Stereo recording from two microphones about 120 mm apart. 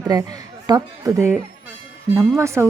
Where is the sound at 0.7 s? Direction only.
35° right (ahead or behind).